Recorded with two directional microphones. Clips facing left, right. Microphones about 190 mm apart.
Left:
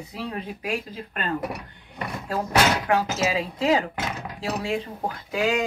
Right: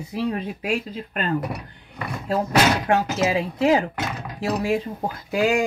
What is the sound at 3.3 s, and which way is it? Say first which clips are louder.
Speech: right 4 dB; 25° right (ahead or behind).